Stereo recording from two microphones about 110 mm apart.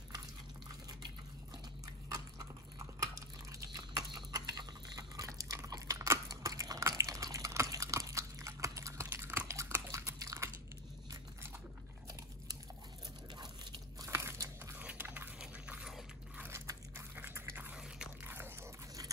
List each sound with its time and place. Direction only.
2.0 s a sound: 30° right (ahead or behind)
3.7 s biting: 35° right (ahead or behind)
14.0 s biting: 25° right (ahead or behind)
14.8 s dog: 15° right (ahead or behind)
16.3 s biting: 20° right (ahead or behind)
18.2 s biting: 20° right (ahead or behind)